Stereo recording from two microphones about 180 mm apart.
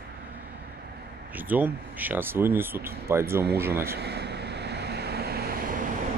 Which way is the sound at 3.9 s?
65° right (ahead or behind).